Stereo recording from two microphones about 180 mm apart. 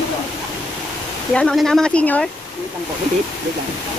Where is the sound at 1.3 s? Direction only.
Centre (ahead or behind).